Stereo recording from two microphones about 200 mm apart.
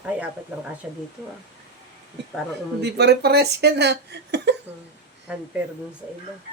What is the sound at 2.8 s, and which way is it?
Speech, 55° right (ahead or behind).